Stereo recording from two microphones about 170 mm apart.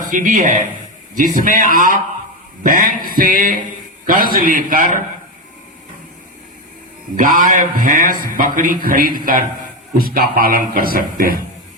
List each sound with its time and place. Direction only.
0.1 s a man's voice: 50° right (ahead or behind)
7.2 s a man's voice: 50° right (ahead or behind)